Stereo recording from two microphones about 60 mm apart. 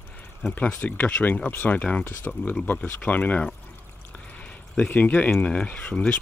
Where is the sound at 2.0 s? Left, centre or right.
Left.